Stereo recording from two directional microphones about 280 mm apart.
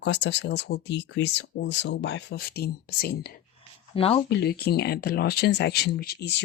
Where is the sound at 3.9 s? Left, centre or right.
Centre.